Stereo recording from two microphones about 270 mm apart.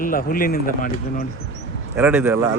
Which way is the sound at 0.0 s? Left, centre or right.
Left.